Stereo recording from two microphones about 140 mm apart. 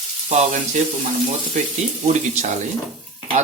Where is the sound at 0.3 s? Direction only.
60° right (ahead or behind).